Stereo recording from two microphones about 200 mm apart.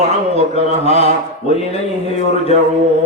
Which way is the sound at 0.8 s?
30° left (ahead or behind).